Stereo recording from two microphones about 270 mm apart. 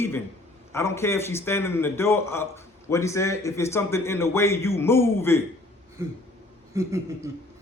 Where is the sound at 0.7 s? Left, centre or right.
Centre.